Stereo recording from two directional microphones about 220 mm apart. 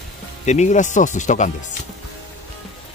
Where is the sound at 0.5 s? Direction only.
30° left (ahead or behind).